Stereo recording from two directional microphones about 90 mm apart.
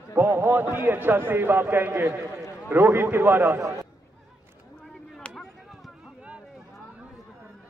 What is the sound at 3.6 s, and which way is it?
Speech, 35° right (ahead or behind).